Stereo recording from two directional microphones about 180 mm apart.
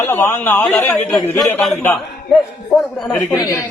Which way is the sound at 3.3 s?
20° left (ahead or behind).